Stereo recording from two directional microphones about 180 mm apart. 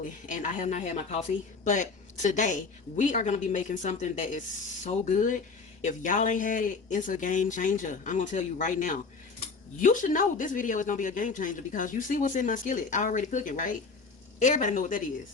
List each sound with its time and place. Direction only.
0.3 s a woman's voice: 45° left (ahead or behind)